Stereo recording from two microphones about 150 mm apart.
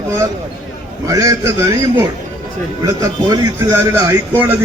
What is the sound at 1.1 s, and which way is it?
A man's voice, 20° right (ahead or behind).